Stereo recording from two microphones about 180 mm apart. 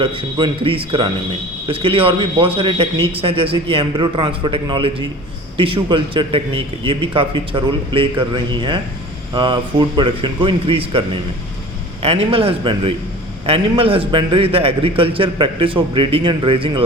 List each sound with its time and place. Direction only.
0.0 s a man's voice: 30° right (ahead or behind)